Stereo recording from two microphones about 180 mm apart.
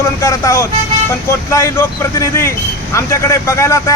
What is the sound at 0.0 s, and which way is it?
A man's voice, 15° left (ahead or behind).